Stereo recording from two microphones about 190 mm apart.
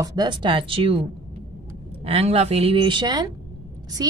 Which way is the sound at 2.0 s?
30° right (ahead or behind).